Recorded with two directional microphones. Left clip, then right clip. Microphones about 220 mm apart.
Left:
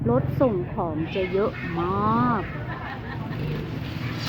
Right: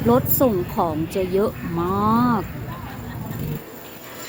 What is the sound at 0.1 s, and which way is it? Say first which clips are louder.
Speech: right 4 dB; 15° right (ahead or behind).